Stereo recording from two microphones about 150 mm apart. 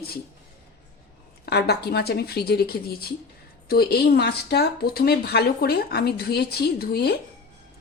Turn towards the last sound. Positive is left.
turn(degrees=90)